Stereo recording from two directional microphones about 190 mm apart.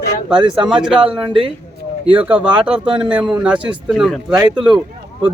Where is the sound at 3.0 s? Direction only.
5° right (ahead or behind).